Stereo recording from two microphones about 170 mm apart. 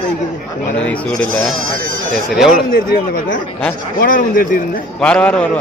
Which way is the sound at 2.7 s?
55° left (ahead or behind).